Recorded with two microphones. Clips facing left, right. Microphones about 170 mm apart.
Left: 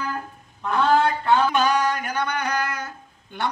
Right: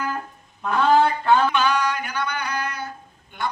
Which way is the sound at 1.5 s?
40° left (ahead or behind).